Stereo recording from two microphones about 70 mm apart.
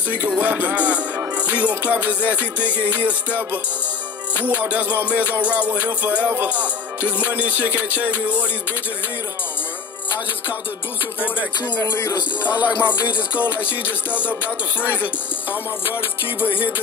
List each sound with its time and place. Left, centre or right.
0.4 s music: right
11.1 s music: left
11.8 s music: left
12.2 s music: left
13.4 s music: left